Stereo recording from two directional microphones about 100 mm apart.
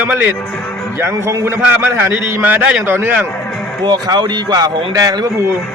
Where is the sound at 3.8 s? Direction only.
45° right (ahead or behind).